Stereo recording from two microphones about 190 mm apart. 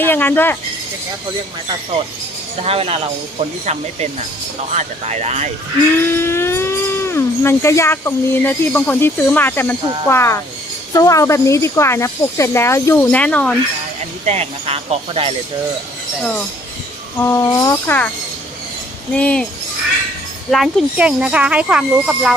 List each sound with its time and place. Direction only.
0.0 s speech: 10° left (ahead or behind)
2.6 s speech: 30° right (ahead or behind)
4.7 s speech: 35° right (ahead or behind)
6.1 s speech: 10° left (ahead or behind)
14.3 s speech: 35° right (ahead or behind)
17.2 s speech: 15° left (ahead or behind)
19.1 s speech: 5° left (ahead or behind)
20.5 s speech: centre (ahead or behind)